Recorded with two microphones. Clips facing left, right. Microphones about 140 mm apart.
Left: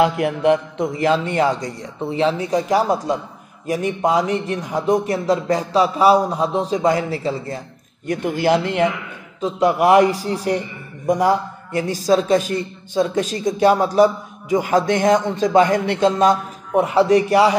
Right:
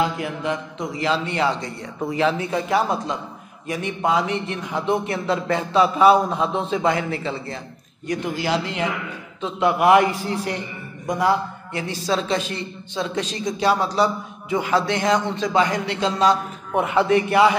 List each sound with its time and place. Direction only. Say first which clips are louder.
0.0 s a man's voice: left 7 dB; 65° left (ahead or behind); by 1.9 s 45° left (ahead or behind)
2.0 s a man's voice: left 2 dB; 30° left (ahead or behind)
8.1 s a man's voice: left 5 dB; 50° left (ahead or behind)
9.4 s a man's voice: left 3 dB; 40° left (ahead or behind)
16.7 s a man's voice: left 4 dB; 35° left (ahead or behind)